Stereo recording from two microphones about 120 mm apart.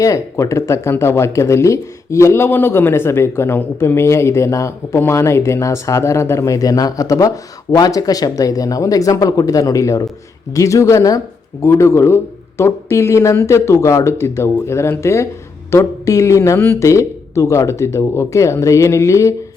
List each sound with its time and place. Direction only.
0.0 s speech: 25° left (ahead or behind)